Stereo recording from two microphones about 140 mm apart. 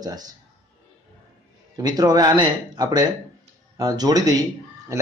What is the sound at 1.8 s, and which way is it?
A man's voice, 25° right (ahead or behind).